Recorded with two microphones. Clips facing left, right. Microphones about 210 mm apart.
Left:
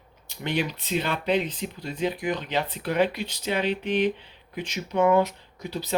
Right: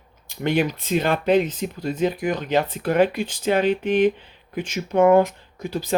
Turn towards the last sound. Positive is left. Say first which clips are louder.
# right 5 dB
turn(degrees=-50)  # may be behind; listen again after turning